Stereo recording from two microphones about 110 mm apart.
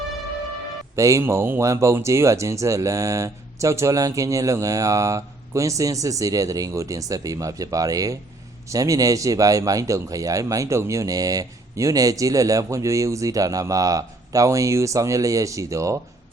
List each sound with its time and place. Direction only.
0.9 s a man's voice: 30° right (ahead or behind)